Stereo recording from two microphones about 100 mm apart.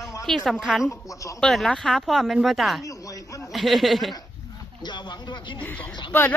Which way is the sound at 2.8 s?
35° left (ahead or behind).